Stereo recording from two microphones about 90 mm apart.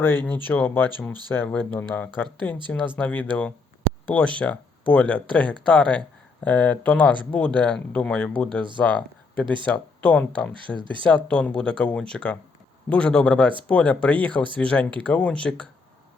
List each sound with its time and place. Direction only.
0.0 s speech: 20° left (ahead or behind)
10.8 s speech: 65° right (ahead or behind)
11.0 s speech: 10° left (ahead or behind)